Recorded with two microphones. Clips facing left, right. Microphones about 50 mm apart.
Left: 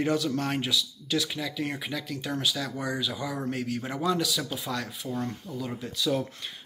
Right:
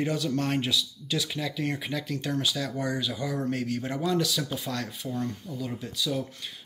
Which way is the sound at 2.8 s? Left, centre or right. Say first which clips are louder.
Right 1 dB; centre.